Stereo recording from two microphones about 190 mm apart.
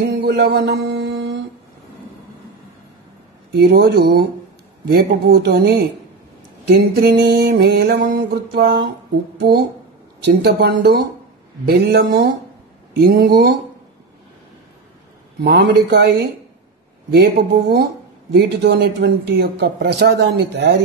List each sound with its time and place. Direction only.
0.0 s mantra: 60° right (ahead or behind)
3.5 s speech: 55° right (ahead or behind)
15.4 s speech: 55° right (ahead or behind)